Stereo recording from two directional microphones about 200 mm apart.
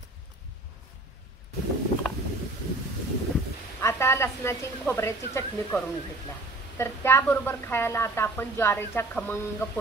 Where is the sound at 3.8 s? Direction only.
15° left (ahead or behind).